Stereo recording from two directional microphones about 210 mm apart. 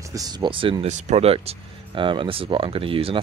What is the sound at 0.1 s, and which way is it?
Speech, 20° right (ahead or behind).